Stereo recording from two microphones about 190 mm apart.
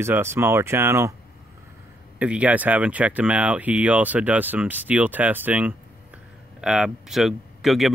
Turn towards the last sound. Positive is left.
turn(degrees=0)  # may be behind; listen again after turning